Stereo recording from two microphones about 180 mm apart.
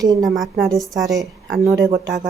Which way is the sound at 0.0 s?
20° right (ahead or behind).